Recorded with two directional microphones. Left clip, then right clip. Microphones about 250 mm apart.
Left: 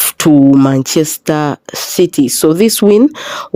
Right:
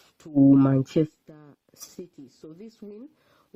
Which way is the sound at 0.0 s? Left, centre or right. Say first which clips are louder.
Left 14 dB; left.